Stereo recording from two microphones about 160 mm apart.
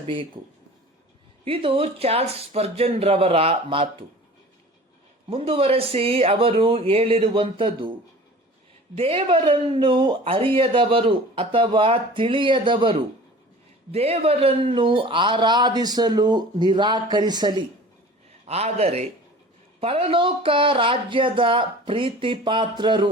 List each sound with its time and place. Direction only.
1.5 s speech: 35° right (ahead or behind)
5.3 s speech: 35° right (ahead or behind)
9.0 s a man's voice: 35° right (ahead or behind)
18.4 s speech: 40° right (ahead or behind)